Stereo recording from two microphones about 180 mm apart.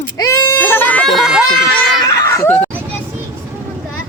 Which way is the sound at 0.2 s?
15° left (ahead or behind).